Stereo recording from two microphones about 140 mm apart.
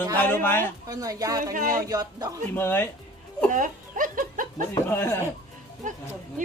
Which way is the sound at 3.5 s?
70° right (ahead or behind).